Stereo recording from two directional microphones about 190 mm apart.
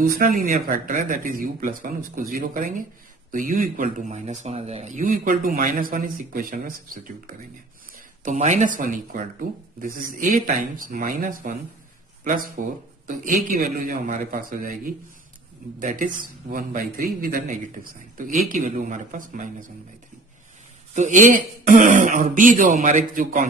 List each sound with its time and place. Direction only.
0.0 s a man's voice: 45° right (ahead or behind)
8.2 s a man's voice: 40° right (ahead or behind)
20.9 s a man's voice: 40° right (ahead or behind)